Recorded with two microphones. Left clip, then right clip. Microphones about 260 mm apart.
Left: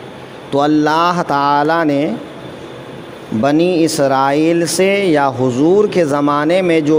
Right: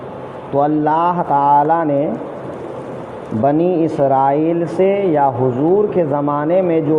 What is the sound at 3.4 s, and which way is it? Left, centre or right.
Speech, left.